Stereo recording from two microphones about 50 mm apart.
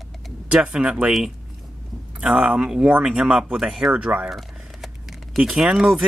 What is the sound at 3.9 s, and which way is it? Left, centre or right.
Speech, right.